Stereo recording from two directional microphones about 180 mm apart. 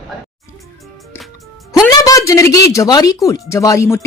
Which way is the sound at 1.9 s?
20° left (ahead or behind).